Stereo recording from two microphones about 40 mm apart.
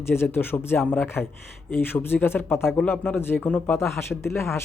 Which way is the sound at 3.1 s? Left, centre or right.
Left.